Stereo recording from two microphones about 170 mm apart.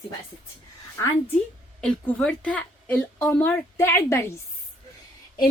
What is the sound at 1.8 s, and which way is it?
A woman's voice, 10° left (ahead or behind).